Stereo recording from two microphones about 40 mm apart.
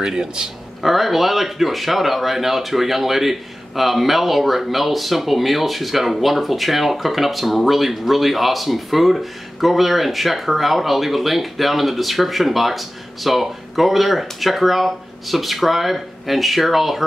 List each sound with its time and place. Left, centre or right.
0.0 s speech: centre
0.8 s speech: centre